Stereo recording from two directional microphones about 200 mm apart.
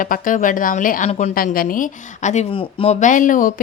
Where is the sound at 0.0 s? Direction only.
40° left (ahead or behind).